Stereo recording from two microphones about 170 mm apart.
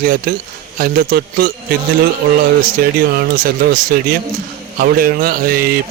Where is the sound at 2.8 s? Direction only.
60° right (ahead or behind).